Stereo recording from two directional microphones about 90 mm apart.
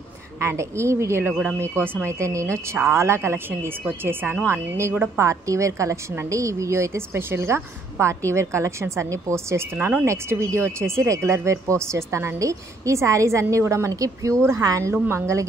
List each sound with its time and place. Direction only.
0.4 s speech: 30° right (ahead or behind)
9.8 s speech: 20° right (ahead or behind)
10.0 s speech: 30° right (ahead or behind)